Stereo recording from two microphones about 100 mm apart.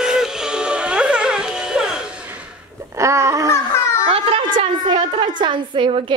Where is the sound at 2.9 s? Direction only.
30° right (ahead or behind).